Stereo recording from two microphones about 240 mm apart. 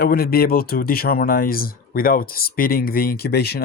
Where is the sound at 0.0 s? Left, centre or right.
Left.